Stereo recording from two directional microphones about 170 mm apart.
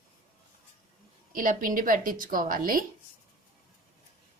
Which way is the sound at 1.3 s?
55° right (ahead or behind).